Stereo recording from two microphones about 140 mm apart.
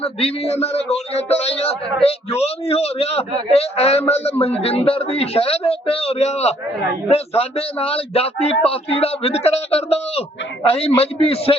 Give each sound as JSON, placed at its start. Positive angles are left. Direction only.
{"t": 0.0, "sound": "a man's voice", "side_deg": 45}